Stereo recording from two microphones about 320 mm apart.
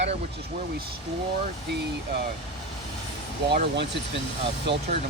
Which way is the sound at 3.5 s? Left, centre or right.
Right.